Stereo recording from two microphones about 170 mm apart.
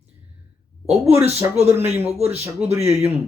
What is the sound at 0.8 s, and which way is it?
Speech, 40° right (ahead or behind).